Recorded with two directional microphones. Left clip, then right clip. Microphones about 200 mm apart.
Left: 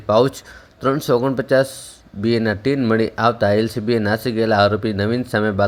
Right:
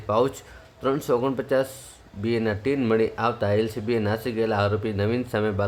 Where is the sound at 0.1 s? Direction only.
25° left (ahead or behind).